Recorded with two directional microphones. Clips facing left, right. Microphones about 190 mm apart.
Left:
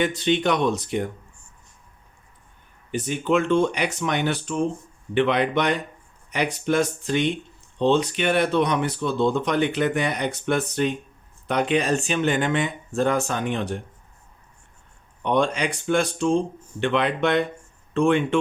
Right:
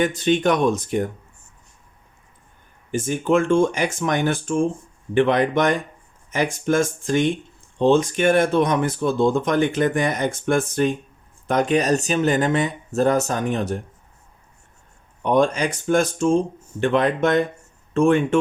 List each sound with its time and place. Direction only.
0.0 s speech: 45° right (ahead or behind)
2.9 s speech: 45° right (ahead or behind)
15.2 s speech: 45° right (ahead or behind)